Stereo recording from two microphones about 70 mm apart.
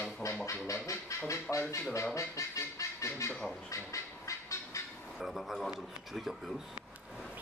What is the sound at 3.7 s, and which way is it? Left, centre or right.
Duck, left.